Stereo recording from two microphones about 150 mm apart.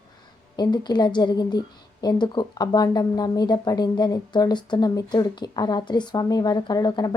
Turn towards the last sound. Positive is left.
turn(degrees=25)  # may be behind; listen again after turning